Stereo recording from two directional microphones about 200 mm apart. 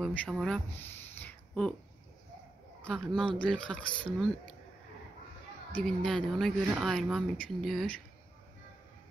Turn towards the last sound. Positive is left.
turn(degrees=0)  # may be behind; listen again after turning